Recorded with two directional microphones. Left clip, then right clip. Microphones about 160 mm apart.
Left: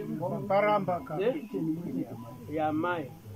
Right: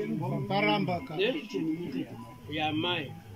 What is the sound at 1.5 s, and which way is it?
Speech, 5° left (ahead or behind).